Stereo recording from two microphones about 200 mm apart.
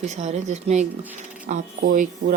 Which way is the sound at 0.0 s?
35° right (ahead or behind).